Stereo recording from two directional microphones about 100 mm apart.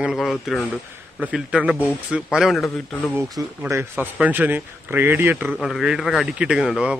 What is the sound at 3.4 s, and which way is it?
Speech, 30° right (ahead or behind).